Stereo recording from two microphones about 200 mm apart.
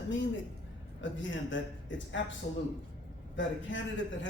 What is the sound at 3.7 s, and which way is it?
Speech, 70° left (ahead or behind).